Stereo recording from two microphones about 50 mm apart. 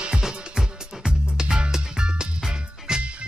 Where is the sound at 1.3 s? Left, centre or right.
Centre.